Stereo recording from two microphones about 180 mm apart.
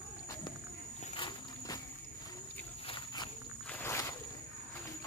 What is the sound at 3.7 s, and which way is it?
Walk, 15° left (ahead or behind).